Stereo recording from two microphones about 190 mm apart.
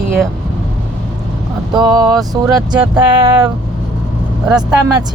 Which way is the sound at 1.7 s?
20° right (ahead or behind).